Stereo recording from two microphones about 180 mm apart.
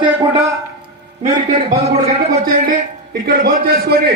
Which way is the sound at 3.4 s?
55° right (ahead or behind).